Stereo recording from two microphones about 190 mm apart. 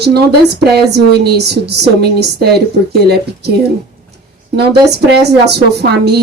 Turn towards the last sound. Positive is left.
turn(degrees=-60)  # may be behind; listen again after turning